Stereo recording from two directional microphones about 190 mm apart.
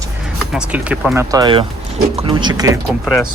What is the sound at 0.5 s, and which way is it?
Speech, 5° right (ahead or behind).